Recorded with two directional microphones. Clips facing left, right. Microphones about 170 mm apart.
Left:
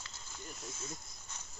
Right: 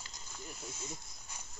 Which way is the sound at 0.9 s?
10° right (ahead or behind).